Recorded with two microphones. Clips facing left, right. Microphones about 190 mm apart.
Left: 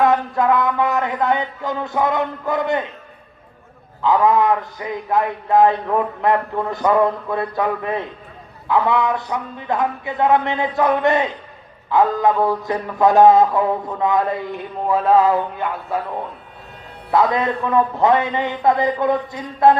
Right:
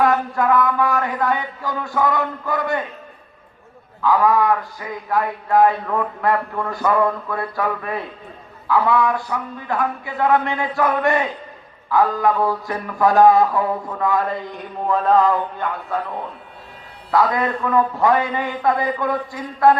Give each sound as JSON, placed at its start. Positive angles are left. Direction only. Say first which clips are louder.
{"t": 0.0, "sound": "a man's voice", "louder": "left 1 dB", "side_deg": 25}
{"t": 4.0, "sound": "a man's voice", "louder": "left 1 dB", "side_deg": 20}
{"t": 14.8, "sound": "a sound", "louder": "left 1 dB", "side_deg": 10}
{"t": 17.1, "sound": "a man's voice", "louder": "left 1 dB", "side_deg": 20}